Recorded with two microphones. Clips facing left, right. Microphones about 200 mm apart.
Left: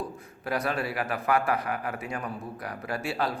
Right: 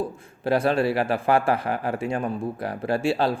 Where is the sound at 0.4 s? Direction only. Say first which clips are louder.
Right 8 dB; 30° right (ahead or behind).